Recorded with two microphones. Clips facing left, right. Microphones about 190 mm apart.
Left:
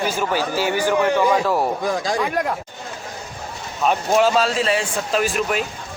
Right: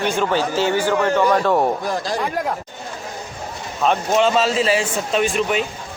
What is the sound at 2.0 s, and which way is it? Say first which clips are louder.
Speech: left 1 dB; 90° left.